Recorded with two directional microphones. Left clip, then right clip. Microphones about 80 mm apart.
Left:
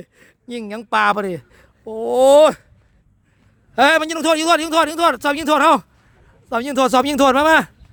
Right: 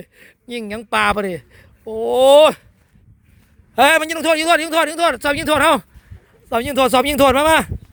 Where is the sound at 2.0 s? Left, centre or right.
Left.